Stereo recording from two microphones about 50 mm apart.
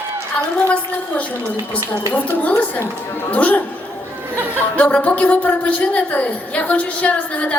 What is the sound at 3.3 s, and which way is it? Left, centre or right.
Speech, left.